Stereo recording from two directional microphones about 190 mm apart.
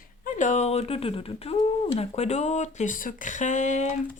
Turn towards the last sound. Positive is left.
turn(degrees=40)  # may be behind; listen again after turning